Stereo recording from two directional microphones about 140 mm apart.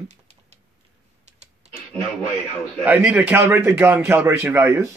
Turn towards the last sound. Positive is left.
turn(degrees=-15)  # may be behind; listen again after turning